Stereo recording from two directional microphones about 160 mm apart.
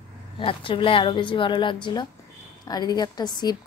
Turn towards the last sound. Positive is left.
turn(degrees=25)  # may be behind; listen again after turning